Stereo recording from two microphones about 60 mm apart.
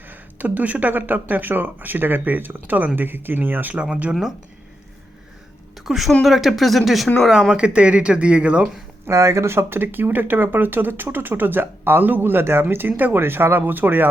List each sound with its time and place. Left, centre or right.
0.1 s speech: right
3.8 s speech: centre
4.1 s speech: centre
5.8 s speech: centre
7.5 s speech: centre
9.0 s speech: right